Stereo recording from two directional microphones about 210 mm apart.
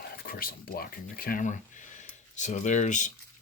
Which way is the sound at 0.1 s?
45° left (ahead or behind).